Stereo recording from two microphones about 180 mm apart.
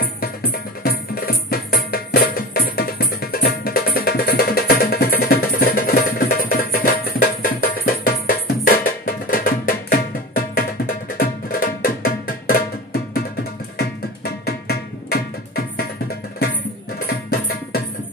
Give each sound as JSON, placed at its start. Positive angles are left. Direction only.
{"t": 0.0, "sound": "music", "side_deg": 55}
{"t": 17.3, "sound": "music", "side_deg": 60}